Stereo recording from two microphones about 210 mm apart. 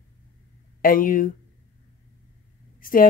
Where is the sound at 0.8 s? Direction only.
40° left (ahead or behind).